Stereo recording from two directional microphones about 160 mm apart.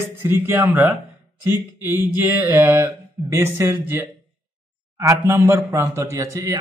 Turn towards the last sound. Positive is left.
turn(degrees=-20)  # may be behind; listen again after turning